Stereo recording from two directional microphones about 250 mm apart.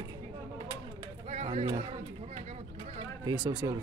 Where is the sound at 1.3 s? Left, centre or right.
Right.